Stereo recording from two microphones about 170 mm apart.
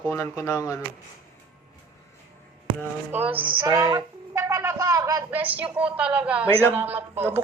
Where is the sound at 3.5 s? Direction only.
30° right (ahead or behind).